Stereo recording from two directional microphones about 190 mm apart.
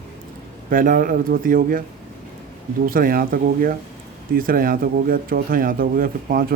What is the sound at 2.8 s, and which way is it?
Speech, 50° right (ahead or behind).